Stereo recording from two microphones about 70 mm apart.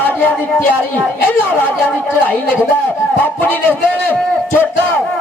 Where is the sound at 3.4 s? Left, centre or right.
Left.